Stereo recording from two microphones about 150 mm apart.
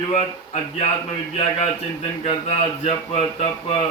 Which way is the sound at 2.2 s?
45° left (ahead or behind).